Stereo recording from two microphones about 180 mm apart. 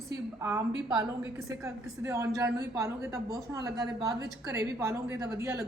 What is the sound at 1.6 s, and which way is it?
A woman's voice, 15° right (ahead or behind).